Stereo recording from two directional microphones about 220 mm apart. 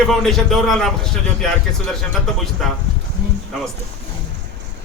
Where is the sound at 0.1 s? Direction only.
Centre (ahead or behind).